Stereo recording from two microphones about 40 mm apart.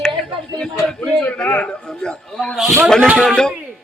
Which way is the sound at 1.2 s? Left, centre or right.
Left.